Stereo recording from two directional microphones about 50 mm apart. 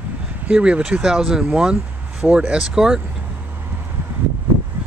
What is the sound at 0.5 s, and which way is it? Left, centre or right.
Speech, right.